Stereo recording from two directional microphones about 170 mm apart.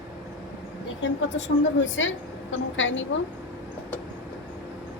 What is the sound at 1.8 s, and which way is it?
A woman's voice, 90° left.